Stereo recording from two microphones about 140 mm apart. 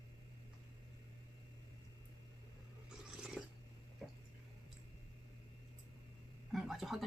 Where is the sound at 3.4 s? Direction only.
5° right (ahead or behind).